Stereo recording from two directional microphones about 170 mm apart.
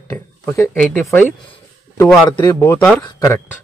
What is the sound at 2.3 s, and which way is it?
Speech, 20° left (ahead or behind).